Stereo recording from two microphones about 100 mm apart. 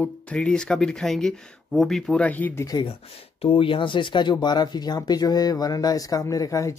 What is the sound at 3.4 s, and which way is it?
Speech, 65° left (ahead or behind).